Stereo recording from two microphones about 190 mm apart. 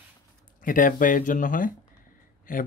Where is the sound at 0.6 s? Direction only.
45° left (ahead or behind).